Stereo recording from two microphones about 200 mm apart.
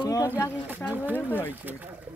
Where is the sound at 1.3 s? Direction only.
10° left (ahead or behind).